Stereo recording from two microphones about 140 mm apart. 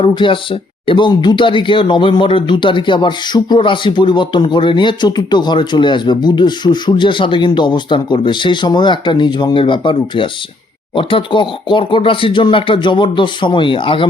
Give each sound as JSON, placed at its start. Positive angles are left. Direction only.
{"t": 0.0, "sound": "speech", "side_deg": 35}